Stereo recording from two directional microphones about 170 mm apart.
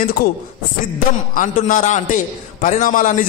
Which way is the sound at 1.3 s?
50° left (ahead or behind).